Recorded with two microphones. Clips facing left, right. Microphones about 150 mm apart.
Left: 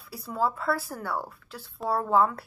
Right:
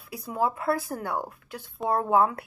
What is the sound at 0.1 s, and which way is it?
A woman's voice, 15° right (ahead or behind).